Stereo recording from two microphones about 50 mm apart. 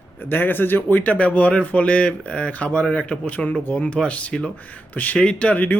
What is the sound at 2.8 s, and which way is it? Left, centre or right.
Speech, centre.